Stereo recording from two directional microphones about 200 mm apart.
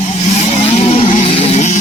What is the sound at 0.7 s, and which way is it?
Vehicle, 30° left (ahead or behind).